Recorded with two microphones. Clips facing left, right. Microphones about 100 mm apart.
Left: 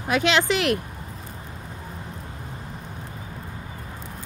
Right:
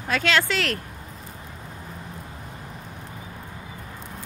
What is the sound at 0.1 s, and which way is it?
Speech, 15° left (ahead or behind).